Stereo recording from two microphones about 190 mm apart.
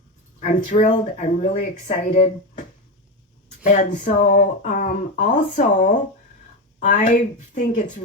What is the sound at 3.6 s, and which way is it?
Speech, 40° left (ahead or behind).